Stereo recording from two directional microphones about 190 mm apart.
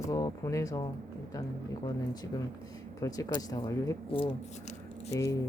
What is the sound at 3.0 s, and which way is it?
Speech, 15° left (ahead or behind).